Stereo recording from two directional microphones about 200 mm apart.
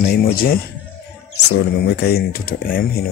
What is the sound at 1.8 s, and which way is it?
Speech, 50° left (ahead or behind).